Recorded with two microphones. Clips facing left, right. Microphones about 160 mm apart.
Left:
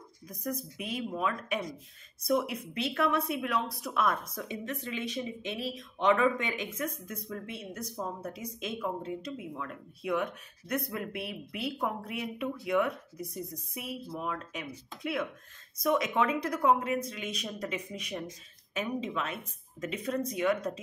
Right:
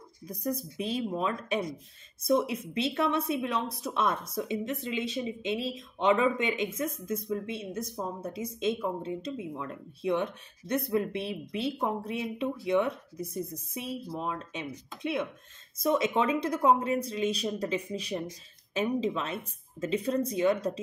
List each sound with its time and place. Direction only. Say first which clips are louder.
0.3 s speech: right 4 dB; 30° right (ahead or behind)